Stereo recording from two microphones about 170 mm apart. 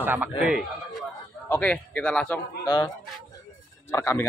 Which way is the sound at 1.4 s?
10° left (ahead or behind).